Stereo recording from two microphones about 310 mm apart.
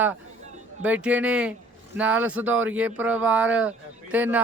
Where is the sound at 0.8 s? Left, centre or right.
Centre.